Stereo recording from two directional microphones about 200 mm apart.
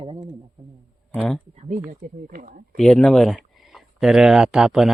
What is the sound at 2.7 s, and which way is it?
Speech, 5° left (ahead or behind).